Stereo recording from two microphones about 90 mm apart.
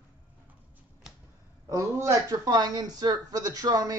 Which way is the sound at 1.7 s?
35° right (ahead or behind).